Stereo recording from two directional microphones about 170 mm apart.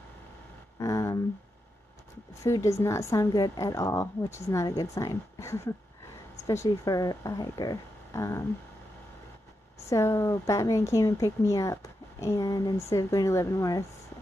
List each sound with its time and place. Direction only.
0.7 s a sound: 20° left (ahead or behind)
2.4 s a woman's voice: 20° left (ahead or behind)
9.8 s a woman's voice: 15° left (ahead or behind)